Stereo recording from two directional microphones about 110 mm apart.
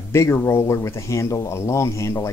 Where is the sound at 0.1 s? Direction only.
25° left (ahead or behind).